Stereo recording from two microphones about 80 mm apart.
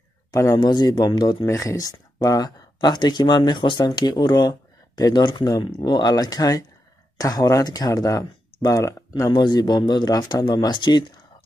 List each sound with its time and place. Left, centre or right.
0.3 s speech: left
0.6 s speech: left
9.3 s speech: left
10.4 s speech: left